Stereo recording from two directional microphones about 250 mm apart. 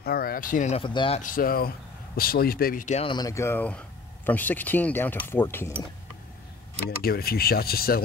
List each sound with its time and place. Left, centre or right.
0.0 s speech: left
1.2 s speech: left; by 5.7 s centre
7.0 s speech: left